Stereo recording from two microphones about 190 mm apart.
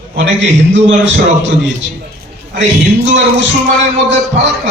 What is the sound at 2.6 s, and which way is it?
Music, 70° right (ahead or behind).